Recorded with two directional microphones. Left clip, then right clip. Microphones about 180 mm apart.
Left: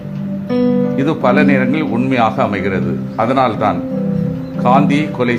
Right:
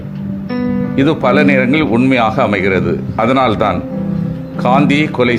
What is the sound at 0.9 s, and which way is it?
Speech, 20° right (ahead or behind).